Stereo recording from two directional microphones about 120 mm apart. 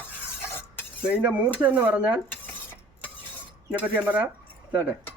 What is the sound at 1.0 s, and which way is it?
Speech, 10° right (ahead or behind).